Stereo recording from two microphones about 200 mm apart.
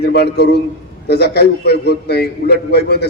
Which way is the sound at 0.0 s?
55° left (ahead or behind).